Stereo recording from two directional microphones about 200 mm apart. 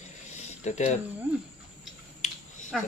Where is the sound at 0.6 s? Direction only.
35° left (ahead or behind).